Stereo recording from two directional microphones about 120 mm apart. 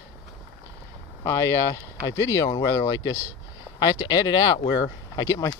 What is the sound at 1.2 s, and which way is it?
Speech, 20° left (ahead or behind).